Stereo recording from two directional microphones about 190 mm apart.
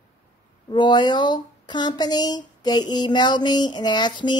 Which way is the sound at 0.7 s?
25° left (ahead or behind).